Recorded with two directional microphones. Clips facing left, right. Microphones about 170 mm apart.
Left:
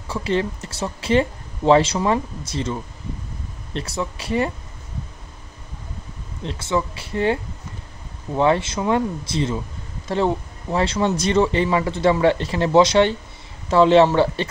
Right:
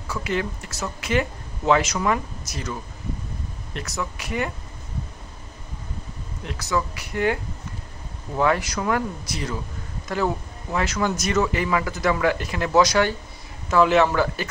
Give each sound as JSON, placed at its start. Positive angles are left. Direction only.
{"t": 0.1, "sound": "speech", "side_deg": 30}
{"t": 6.4, "sound": "speech", "side_deg": 25}
{"t": 8.4, "sound": "speech", "side_deg": 25}